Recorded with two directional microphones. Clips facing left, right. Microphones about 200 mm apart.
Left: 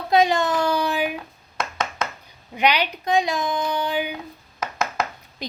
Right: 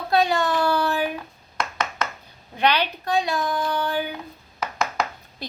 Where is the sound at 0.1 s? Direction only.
15° left (ahead or behind).